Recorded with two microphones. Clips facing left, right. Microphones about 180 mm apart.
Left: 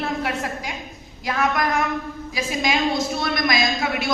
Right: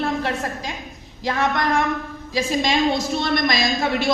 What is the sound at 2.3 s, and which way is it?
A woman's voice, 30° right (ahead or behind).